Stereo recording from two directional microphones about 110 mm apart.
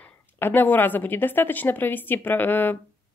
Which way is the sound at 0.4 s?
20° left (ahead or behind).